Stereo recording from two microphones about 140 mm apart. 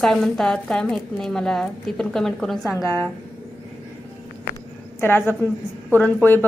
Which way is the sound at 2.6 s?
20° left (ahead or behind).